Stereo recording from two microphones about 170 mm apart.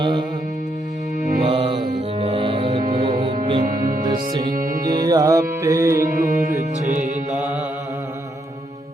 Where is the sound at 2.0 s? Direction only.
35° right (ahead or behind).